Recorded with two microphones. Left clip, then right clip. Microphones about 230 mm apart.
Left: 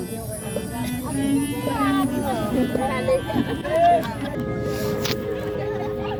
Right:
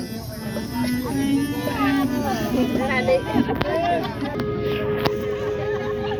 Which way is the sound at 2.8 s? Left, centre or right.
Right.